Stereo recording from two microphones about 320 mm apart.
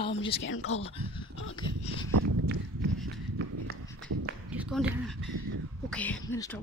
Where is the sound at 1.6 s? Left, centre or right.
Centre.